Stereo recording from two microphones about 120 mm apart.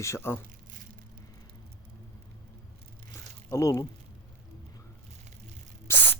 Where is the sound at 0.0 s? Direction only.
20° left (ahead or behind).